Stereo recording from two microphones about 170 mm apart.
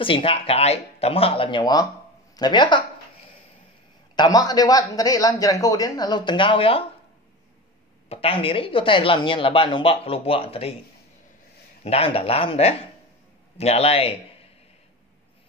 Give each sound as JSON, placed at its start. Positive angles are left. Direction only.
{"t": 0.0, "sound": "a man's voice", "side_deg": 30}
{"t": 4.1, "sound": "a man's voice", "side_deg": 25}
{"t": 8.1, "sound": "speech", "side_deg": 35}
{"t": 11.8, "sound": "speech", "side_deg": 35}